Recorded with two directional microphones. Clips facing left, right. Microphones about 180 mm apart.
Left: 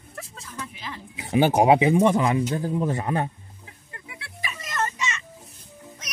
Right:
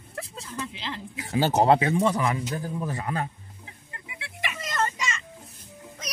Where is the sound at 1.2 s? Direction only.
20° left (ahead or behind).